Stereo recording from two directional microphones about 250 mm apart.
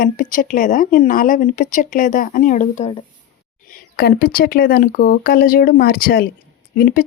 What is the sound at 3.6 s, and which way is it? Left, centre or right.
Speech, left.